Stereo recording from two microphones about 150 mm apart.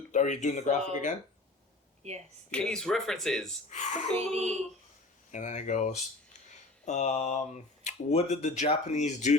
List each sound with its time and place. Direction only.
0.1 s speech: 55° left (ahead or behind)
2.0 s a sound: 45° right (ahead or behind)
2.5 s speech: 5° left (ahead or behind)
3.7 s speech: 50° left (ahead or behind)
4.4 s a sound: 50° right (ahead or behind)
5.3 s speech: 55° left (ahead or behind)